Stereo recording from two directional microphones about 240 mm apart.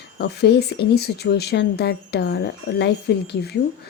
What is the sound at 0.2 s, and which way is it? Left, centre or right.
Speech, left.